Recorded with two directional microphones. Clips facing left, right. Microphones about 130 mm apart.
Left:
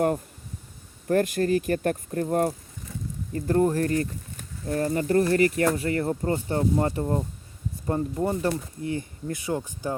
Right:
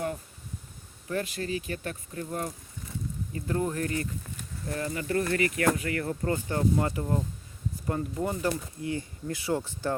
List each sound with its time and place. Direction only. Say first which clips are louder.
1.0 s speech: left 9 dB; 50° left (ahead or behind); by 9.9 s 15° left (ahead or behind)